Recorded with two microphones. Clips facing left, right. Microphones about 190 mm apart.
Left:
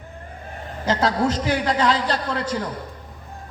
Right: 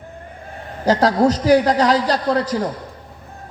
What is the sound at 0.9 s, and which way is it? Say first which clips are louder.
A man's voice: right 6 dB; 40° right (ahead or behind).